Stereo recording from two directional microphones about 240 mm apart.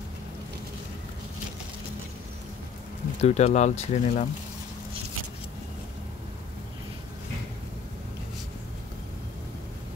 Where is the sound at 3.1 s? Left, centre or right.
Left.